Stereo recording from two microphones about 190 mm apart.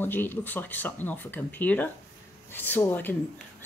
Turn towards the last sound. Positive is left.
turn(degrees=10)  # may be behind; listen again after turning